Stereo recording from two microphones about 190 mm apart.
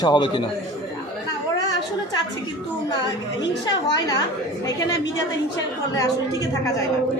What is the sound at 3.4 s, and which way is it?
Speech, 20° left (ahead or behind).